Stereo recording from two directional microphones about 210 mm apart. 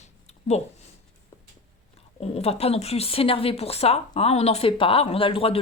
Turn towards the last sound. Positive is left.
turn(degrees=25)  # may be behind; listen again after turning